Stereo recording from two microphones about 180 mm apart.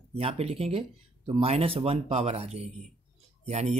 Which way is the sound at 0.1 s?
30° right (ahead or behind).